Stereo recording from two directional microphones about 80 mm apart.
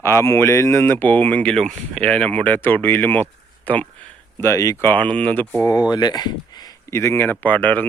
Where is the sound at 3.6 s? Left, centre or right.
Centre.